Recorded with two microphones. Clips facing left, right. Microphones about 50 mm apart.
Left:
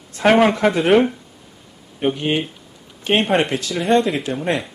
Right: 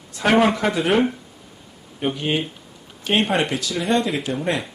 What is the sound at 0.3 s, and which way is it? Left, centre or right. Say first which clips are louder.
Speech: right 1 dB; left.